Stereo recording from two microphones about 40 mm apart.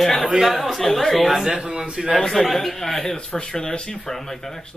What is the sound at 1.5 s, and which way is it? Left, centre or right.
Speech, right.